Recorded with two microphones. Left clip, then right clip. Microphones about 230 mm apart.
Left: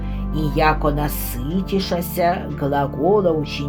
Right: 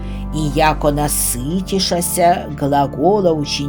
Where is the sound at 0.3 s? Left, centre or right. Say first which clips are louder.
Right 3 dB; right.